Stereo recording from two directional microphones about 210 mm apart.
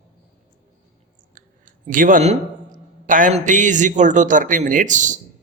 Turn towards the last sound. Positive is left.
turn(degrees=-35)  # may be behind; listen again after turning